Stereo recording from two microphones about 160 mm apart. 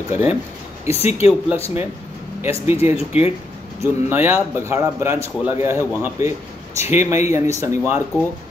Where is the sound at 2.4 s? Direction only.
15° right (ahead or behind).